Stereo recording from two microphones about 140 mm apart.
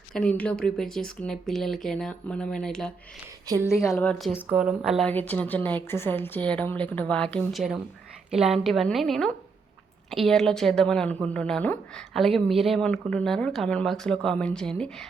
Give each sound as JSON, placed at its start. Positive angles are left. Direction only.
{"t": 0.1, "sound": "speech", "side_deg": 5}
{"t": 3.7, "sound": "a woman's voice", "side_deg": 20}
{"t": 3.9, "sound": "speech", "side_deg": 5}
{"t": 4.4, "sound": "a woman's voice", "side_deg": -10}
{"t": 5.0, "sound": "a woman's voice", "side_deg": 10}